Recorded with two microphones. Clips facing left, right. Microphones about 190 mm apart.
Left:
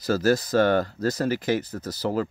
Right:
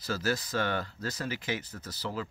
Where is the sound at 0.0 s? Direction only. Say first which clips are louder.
Left 10 dB; 40° left (ahead or behind).